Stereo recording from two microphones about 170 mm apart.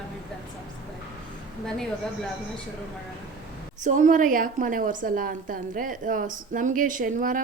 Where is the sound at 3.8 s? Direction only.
50° right (ahead or behind).